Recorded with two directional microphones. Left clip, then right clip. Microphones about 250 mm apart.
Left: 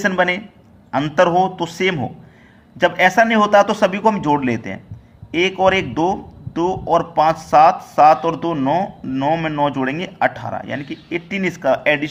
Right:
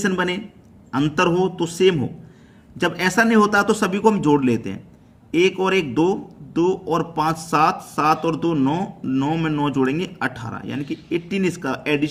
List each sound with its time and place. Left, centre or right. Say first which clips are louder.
0.0 s speech: left 5 dB; centre